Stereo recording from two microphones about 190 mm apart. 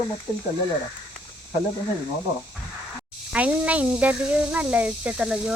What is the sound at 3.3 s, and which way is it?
Speech, 5° right (ahead or behind).